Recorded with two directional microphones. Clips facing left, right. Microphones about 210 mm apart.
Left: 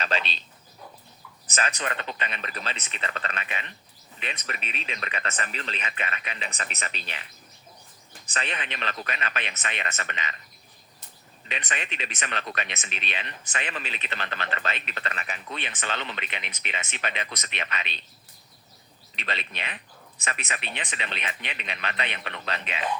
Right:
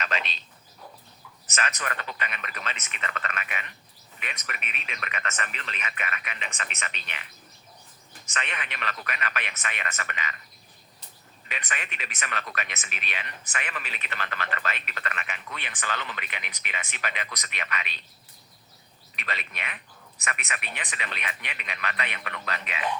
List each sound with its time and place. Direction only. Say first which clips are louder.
0.0 s a sound: left 3 dB; 30° left (ahead or behind)
1.5 s speech: left 2 dB; 30° left (ahead or behind)
8.3 s a man's voice: left 2 dB; 35° left (ahead or behind)
11.4 s a man's voice: left 3 dB; 25° left (ahead or behind)
19.1 s a man's voice: left 2 dB; 30° left (ahead or behind)